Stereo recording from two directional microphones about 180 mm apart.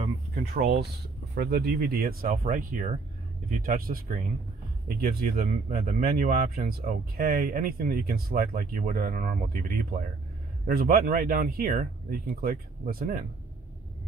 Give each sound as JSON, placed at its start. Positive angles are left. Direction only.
{"t": 0.3, "sound": "speech", "side_deg": -55}